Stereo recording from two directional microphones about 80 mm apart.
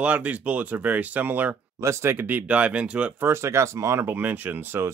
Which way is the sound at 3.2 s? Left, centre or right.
Right.